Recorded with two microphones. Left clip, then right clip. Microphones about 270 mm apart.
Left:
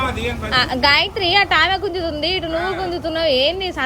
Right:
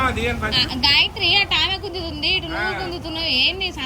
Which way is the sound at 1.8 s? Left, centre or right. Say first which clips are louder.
Left 7 dB; right.